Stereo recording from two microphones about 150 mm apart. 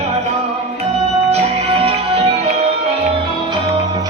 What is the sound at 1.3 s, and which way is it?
Music, 40° right (ahead or behind).